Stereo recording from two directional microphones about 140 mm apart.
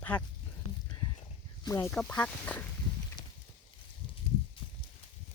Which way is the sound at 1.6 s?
20° left (ahead or behind).